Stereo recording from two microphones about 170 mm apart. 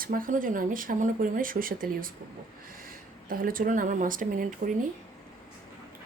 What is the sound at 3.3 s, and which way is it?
Speech, 55° right (ahead or behind).